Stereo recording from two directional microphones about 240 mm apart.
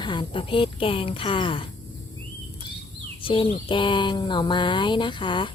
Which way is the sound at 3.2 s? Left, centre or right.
Left.